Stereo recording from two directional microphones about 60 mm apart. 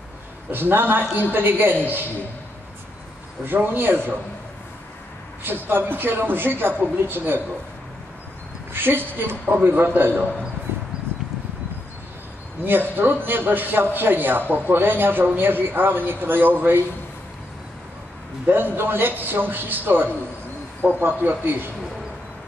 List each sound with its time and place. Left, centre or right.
0.5 s a man's voice: right
3.4 s a man's voice: right
5.4 s a man's voice: right
8.7 s a man's voice: right
12.6 s a man's voice: right
18.5 s a man's voice: right